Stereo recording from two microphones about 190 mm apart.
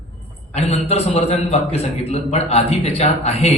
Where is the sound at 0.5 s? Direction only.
35° left (ahead or behind).